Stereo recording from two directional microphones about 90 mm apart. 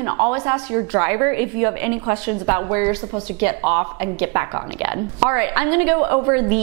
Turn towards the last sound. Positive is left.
turn(degrees=-20)  # may be behind; listen again after turning